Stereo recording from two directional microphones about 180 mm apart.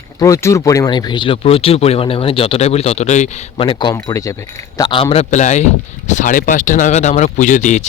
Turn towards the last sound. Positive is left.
turn(degrees=40)  # may be behind; listen again after turning